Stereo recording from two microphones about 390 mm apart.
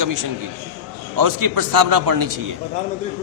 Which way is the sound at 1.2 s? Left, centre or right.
Right.